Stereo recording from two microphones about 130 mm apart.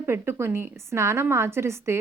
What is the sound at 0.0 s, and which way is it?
A woman's voice, 20° right (ahead or behind).